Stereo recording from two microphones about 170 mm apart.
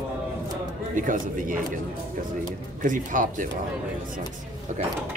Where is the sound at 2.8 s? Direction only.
50° right (ahead or behind).